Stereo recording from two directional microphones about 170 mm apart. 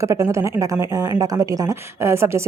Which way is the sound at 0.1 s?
15° right (ahead or behind).